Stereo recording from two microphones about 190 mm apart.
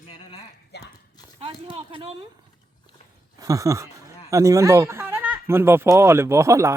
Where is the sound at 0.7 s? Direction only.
60° left (ahead or behind).